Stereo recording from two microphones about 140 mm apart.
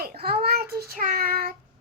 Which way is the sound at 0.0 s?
90° right.